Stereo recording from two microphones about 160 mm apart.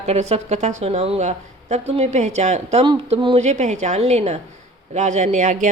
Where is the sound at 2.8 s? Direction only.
30° right (ahead or behind); by 5.7 s 50° right (ahead or behind).